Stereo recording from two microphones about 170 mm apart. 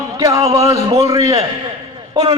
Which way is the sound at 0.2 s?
20° right (ahead or behind).